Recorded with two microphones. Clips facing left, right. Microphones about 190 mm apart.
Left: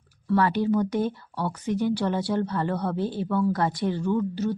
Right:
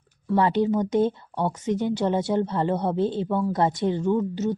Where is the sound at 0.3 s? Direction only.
20° right (ahead or behind).